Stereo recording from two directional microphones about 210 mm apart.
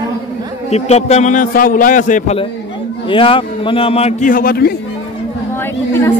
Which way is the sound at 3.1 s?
25° left (ahead or behind).